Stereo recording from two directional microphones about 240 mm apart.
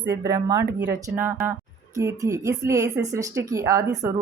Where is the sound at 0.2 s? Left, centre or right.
Centre.